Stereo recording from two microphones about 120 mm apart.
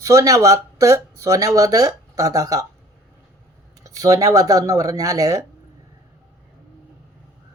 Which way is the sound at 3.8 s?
30° right (ahead or behind).